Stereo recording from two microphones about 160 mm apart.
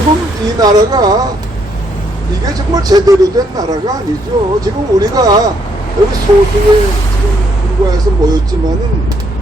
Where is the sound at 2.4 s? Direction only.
25° right (ahead or behind).